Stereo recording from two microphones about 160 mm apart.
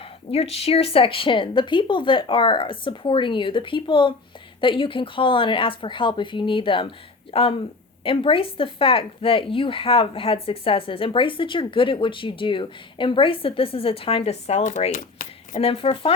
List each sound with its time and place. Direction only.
0.0 s speech: 40° left (ahead or behind)
15.5 s speech: 35° left (ahead or behind)